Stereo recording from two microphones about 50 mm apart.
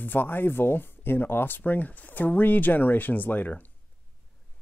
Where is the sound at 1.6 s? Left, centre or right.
Left.